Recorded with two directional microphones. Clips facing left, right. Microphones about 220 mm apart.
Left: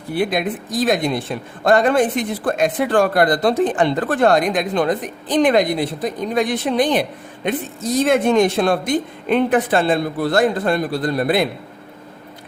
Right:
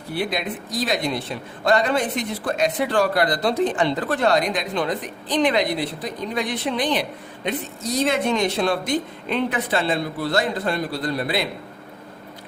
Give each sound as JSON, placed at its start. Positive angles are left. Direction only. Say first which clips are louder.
{"t": 0.1, "sound": "a man's voice", "louder": "left 6 dB", "side_deg": 50}